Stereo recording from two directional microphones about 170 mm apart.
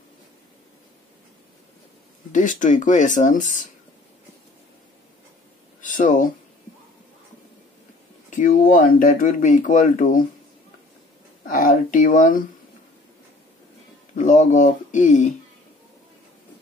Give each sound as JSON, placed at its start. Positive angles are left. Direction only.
{"t": 2.3, "sound": "speech", "side_deg": 50}
{"t": 5.8, "sound": "a sound", "side_deg": 50}
{"t": 8.3, "sound": "speech", "side_deg": 50}
{"t": 11.4, "sound": "speech", "side_deg": 55}
{"t": 14.1, "sound": "speech", "side_deg": 50}